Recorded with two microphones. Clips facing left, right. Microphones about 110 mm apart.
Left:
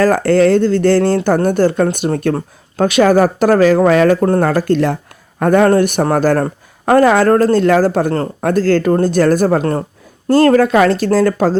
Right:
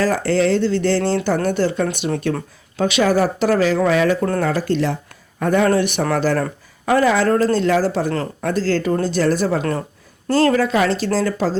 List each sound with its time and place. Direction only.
0.0 s speech: 50° left (ahead or behind)
8.1 s speech: 40° left (ahead or behind)
8.4 s speech: 55° left (ahead or behind)